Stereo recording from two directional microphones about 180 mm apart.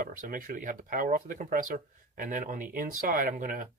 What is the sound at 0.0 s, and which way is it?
Speech, 50° right (ahead or behind).